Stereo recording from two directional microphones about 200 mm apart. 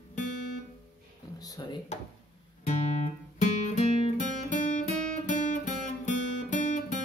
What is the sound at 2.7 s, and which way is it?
Music, 35° left (ahead or behind).